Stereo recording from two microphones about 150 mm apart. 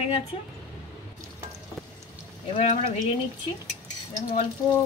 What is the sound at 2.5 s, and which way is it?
Speech, 50° left (ahead or behind).